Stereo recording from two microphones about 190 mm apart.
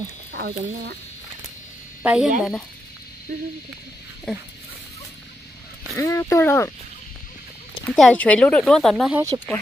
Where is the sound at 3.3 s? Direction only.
50° right (ahead or behind).